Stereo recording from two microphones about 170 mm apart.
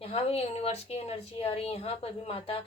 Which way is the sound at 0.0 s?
35° left (ahead or behind).